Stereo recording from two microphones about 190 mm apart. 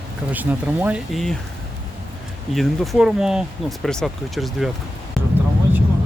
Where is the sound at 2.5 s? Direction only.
Centre (ahead or behind).